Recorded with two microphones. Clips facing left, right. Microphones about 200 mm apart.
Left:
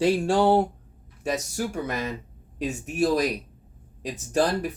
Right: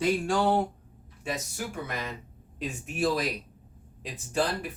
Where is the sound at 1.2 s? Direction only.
45° left (ahead or behind).